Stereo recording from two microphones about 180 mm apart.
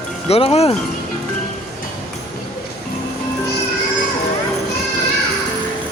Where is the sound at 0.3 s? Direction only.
35° left (ahead or behind).